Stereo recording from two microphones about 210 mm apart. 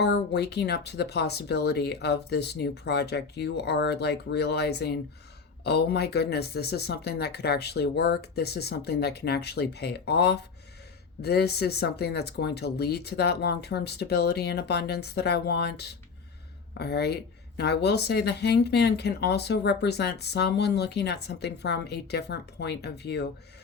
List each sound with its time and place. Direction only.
0.0 s speech: 50° left (ahead or behind)